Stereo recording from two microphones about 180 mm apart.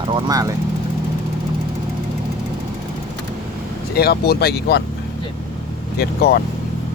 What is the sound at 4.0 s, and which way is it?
Speech, 60° left (ahead or behind).